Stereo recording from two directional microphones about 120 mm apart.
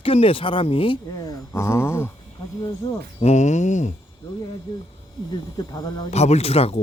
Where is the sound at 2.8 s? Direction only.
40° left (ahead or behind).